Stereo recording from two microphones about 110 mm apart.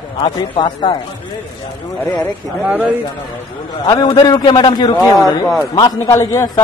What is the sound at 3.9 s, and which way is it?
A man's voice, 40° left (ahead or behind).